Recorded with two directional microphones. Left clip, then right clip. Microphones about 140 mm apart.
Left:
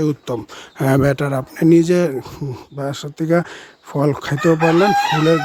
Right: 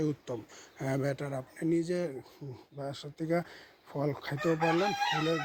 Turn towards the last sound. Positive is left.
turn(degrees=45)  # may be behind; listen again after turning